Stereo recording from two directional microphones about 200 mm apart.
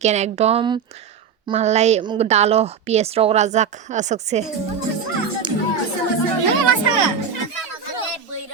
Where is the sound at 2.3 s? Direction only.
35° right (ahead or behind).